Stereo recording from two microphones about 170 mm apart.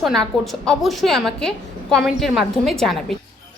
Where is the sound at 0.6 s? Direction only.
Centre (ahead or behind).